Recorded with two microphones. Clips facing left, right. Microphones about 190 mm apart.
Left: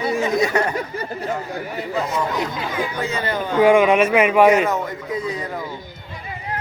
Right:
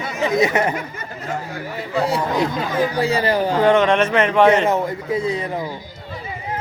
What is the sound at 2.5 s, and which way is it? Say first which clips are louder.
Speech: right 5 dB; 45° right (ahead or behind).